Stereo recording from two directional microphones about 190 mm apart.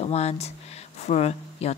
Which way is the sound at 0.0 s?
35° left (ahead or behind).